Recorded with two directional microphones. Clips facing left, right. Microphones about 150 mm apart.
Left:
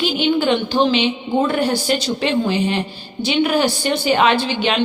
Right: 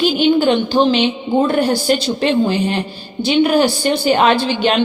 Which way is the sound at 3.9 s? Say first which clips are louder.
Right 1 dB; 40° right (ahead or behind).